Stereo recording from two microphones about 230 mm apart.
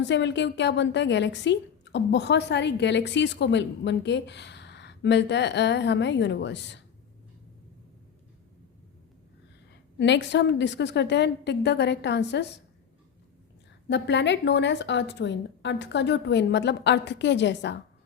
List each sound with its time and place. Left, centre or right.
0.0 s a woman's voice: left
10.0 s a woman's voice: left
13.8 s a woman's voice: left